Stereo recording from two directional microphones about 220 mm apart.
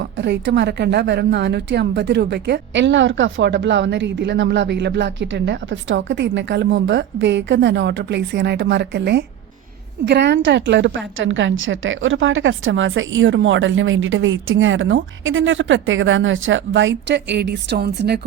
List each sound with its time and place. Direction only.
0.0 s a woman's voice: 50° right (ahead or behind)